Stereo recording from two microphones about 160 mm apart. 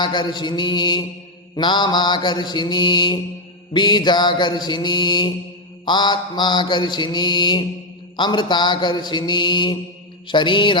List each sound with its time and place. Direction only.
0.0 s mantra: 30° left (ahead or behind)